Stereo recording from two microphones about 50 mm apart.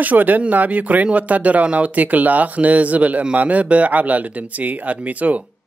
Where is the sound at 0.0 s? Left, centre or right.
Right.